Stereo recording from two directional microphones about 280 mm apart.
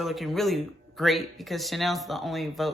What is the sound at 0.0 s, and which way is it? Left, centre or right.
Speech, centre.